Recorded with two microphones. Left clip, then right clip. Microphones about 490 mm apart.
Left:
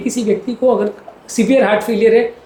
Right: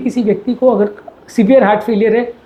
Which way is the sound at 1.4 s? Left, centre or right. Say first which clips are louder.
Right 3 dB; right.